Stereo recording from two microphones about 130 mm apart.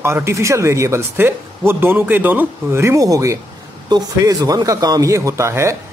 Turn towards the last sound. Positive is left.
turn(degrees=-20)  # may be behind; listen again after turning